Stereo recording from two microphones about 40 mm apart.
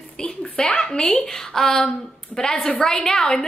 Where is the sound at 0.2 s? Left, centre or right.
Left.